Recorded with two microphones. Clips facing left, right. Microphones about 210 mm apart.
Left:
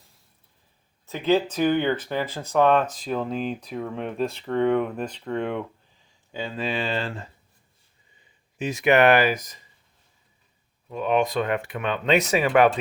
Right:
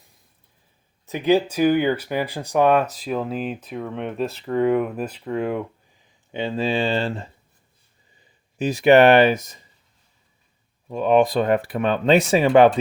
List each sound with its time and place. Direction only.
1.0 s speech: 15° right (ahead or behind)
6.3 s speech: 25° right (ahead or behind)
8.5 s speech: 35° right (ahead or behind)
10.8 s speech: 35° right (ahead or behind)